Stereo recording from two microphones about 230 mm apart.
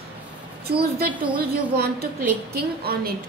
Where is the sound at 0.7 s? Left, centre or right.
Right.